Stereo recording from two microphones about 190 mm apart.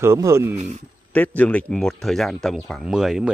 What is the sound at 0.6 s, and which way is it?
Speech, 40° right (ahead or behind).